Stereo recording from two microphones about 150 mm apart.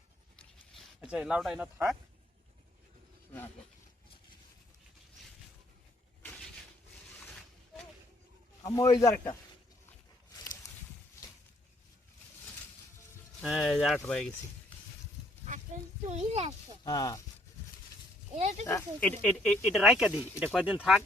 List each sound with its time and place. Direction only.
1.0 s speech: 5° right (ahead or behind)
8.6 s speech: 25° left (ahead or behind)
10.3 s a sound: 20° left (ahead or behind)
13.4 s speech: centre (ahead or behind)
15.4 s a sound: 55° right (ahead or behind)
16.8 s speech: 25° left (ahead or behind)
18.3 s speech: 45° right (ahead or behind)
18.6 s speech: 20° left (ahead or behind); by 21.0 s 5° right (ahead or behind)